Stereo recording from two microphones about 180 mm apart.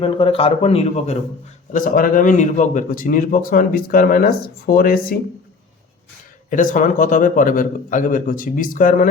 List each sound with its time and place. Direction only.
0.0 s a man's voice: 30° left (ahead or behind)
1.7 s speech: 50° left (ahead or behind)
6.5 s speech: 45° left (ahead or behind)